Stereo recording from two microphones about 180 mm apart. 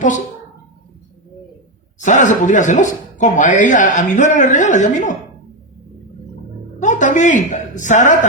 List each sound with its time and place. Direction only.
2.0 s speech: 45° left (ahead or behind)
6.8 s a woman's voice: 45° left (ahead or behind)